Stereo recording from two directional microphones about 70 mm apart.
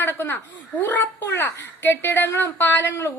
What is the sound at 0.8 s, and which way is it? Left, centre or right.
A woman's voice, left.